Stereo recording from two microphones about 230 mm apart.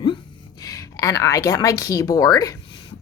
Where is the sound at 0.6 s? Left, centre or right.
Centre.